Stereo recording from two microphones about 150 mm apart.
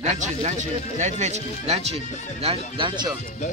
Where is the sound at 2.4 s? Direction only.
35° right (ahead or behind).